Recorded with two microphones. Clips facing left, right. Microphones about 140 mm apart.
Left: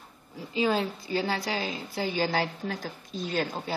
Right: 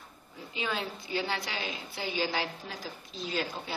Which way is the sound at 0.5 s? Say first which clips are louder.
Left 8 dB; 35° left (ahead or behind).